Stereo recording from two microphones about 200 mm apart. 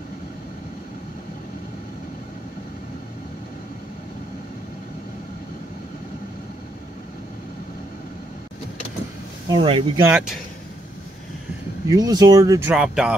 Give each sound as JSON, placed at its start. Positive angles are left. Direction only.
{"t": 9.5, "sound": "speech", "side_deg": -25}
{"t": 10.0, "sound": "speech", "side_deg": -10}
{"t": 11.9, "sound": "speech", "side_deg": -20}